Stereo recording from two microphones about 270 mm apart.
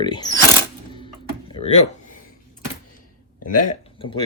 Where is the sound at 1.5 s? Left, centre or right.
Left.